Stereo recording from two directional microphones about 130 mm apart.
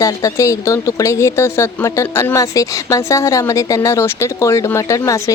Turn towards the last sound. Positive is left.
turn(degrees=25)  # may be behind; listen again after turning